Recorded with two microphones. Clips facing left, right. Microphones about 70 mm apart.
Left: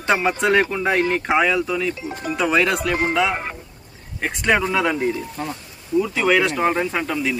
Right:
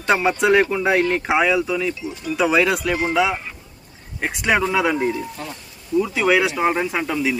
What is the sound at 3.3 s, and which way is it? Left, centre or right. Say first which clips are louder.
Speech: left 2 dB; left.